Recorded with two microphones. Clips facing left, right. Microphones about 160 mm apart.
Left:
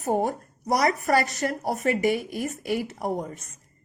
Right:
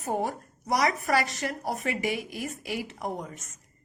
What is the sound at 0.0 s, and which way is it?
A woman's voice, 45° left (ahead or behind).